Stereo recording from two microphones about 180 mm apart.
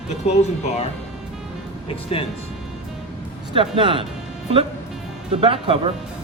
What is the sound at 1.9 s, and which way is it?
Speech, 30° left (ahead or behind).